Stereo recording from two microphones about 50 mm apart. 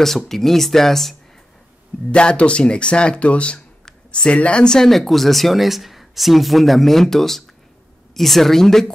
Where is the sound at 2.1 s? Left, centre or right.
Left.